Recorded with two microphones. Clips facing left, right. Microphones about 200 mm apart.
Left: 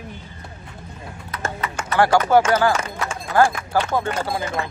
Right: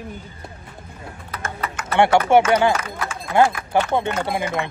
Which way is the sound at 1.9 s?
25° right (ahead or behind).